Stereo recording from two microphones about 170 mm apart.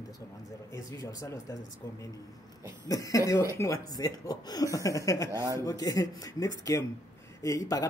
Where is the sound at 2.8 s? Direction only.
20° left (ahead or behind).